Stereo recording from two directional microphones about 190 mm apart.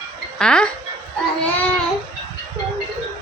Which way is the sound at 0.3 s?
5° left (ahead or behind).